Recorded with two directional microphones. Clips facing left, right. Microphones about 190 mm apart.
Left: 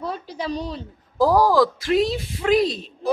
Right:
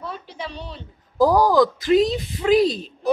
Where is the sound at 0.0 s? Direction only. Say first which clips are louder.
Left 4 dB; 35° left (ahead or behind).